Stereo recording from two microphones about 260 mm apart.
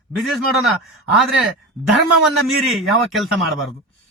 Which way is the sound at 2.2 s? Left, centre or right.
Centre.